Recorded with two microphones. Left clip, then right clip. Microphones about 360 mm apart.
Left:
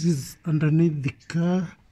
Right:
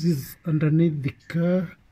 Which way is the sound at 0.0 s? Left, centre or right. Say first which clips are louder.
Even; centre.